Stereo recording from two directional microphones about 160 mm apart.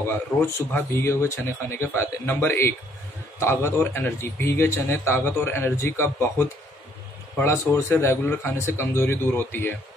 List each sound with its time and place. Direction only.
0.0 s a man's voice: 15° left (ahead or behind)